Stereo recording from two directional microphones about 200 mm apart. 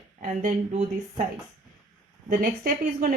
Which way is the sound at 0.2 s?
40° right (ahead or behind).